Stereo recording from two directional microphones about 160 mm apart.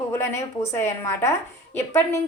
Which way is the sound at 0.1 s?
20° left (ahead or behind).